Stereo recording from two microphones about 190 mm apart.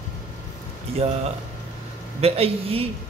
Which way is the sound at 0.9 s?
30° right (ahead or behind).